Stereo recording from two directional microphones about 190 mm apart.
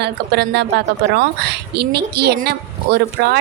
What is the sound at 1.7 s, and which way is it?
A woman's voice, 60° right (ahead or behind).